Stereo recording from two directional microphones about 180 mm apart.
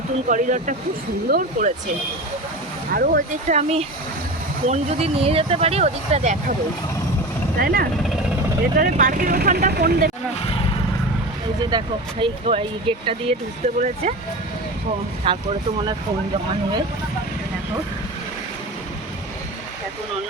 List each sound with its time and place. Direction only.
0.3 s speech: 45° right (ahead or behind)
2.9 s speech: 55° right (ahead or behind)
3.5 s speech: 35° right (ahead or behind)
7.6 s speech: 55° right (ahead or behind)
11.7 s speech: 25° right (ahead or behind)
13.7 s speech: 40° right (ahead or behind)
15.3 s speech: 30° right (ahead or behind)